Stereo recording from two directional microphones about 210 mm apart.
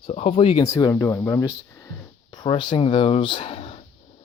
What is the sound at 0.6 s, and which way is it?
Speech, 15° left (ahead or behind).